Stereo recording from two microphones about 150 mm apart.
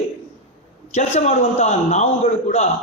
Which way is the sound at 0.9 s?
45° left (ahead or behind).